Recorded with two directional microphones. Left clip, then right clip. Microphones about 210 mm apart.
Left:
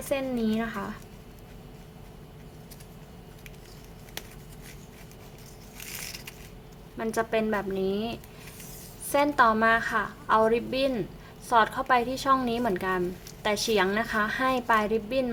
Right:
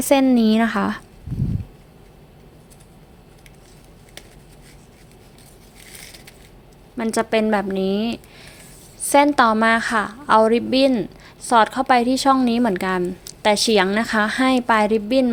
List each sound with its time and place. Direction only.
0.1 s a woman's voice: 50° right (ahead or behind)
6.9 s a woman's voice: 35° right (ahead or behind)